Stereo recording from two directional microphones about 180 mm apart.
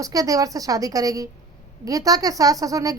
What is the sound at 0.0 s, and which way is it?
A woman's voice, 20° right (ahead or behind).